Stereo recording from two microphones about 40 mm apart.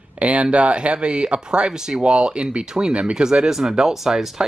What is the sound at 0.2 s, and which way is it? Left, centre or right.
Speech, right.